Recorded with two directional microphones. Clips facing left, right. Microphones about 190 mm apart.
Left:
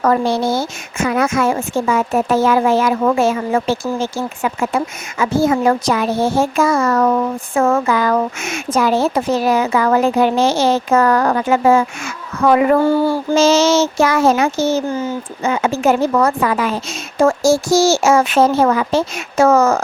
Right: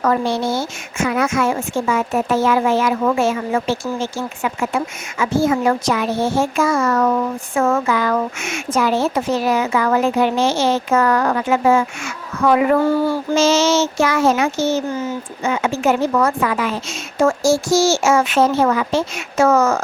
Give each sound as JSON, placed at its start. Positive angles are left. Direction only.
{"t": 0.0, "sound": "child singing", "side_deg": 40}